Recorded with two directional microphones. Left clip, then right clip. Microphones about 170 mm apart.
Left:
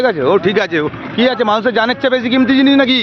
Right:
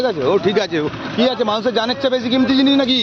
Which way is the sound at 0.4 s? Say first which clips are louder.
Left 3 dB; 10° right (ahead or behind).